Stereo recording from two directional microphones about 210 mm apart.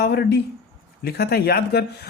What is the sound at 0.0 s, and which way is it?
Speech, 50° left (ahead or behind).